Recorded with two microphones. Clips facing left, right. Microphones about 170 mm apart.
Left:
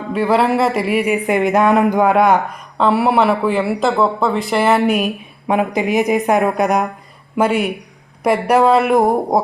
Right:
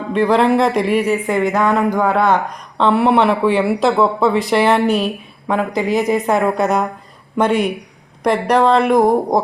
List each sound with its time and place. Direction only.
0.1 s speech: 5° left (ahead or behind)